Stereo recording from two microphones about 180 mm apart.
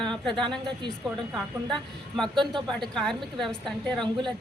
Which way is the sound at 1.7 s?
5° left (ahead or behind).